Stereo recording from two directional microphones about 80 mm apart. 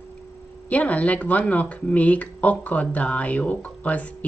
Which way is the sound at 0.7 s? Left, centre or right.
Centre.